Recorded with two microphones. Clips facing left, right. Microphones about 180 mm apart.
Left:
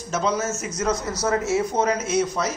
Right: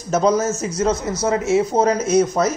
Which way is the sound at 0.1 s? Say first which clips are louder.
Right 7 dB; 40° right (ahead or behind).